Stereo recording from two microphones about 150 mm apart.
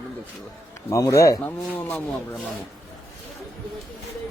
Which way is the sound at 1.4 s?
10° left (ahead or behind).